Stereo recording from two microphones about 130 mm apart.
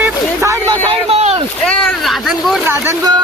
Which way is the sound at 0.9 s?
50° right (ahead or behind).